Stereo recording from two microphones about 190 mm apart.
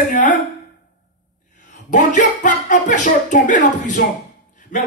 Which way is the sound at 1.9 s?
40° left (ahead or behind).